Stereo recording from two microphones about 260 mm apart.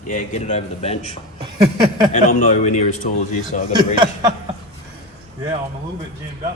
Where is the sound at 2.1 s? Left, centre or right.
Left.